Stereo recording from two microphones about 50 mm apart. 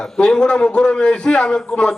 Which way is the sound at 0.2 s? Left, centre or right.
Centre.